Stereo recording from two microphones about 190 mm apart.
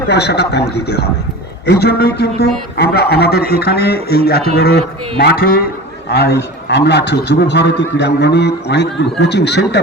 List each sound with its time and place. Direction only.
0.1 s a man's voice: 60° left (ahead or behind)
1.6 s a man's voice: 60° left (ahead or behind)